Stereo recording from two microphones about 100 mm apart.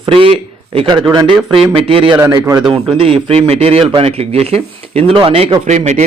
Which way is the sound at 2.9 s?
65° right (ahead or behind).